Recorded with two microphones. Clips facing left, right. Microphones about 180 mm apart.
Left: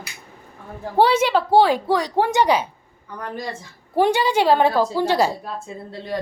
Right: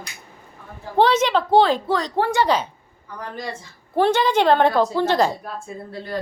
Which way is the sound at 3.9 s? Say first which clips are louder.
Even; 10° left (ahead or behind).